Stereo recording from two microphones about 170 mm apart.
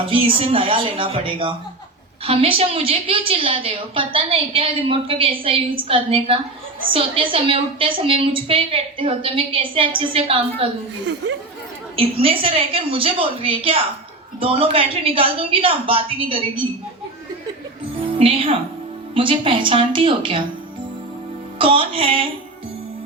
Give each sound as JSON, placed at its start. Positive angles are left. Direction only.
{"t": 0.0, "sound": "a woman's voice", "side_deg": -30}
{"t": 11.9, "sound": "a woman's voice", "side_deg": -30}
{"t": 18.2, "sound": "a woman's voice", "side_deg": -30}
{"t": 21.6, "sound": "a woman's voice", "side_deg": -30}